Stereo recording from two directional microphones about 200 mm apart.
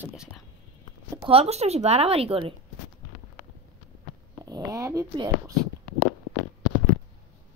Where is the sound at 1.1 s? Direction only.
25° right (ahead or behind).